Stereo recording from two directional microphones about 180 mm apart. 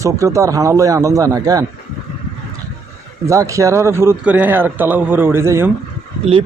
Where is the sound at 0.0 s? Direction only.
15° right (ahead or behind).